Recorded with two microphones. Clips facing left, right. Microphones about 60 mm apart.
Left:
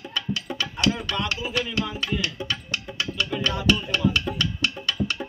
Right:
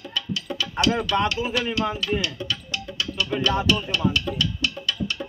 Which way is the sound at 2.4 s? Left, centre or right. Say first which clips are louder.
Even; centre.